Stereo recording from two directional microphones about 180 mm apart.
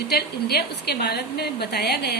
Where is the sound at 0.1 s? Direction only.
60° left (ahead or behind).